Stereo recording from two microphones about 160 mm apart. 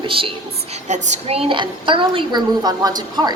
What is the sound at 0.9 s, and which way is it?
A woman's voice, 45° right (ahead or behind).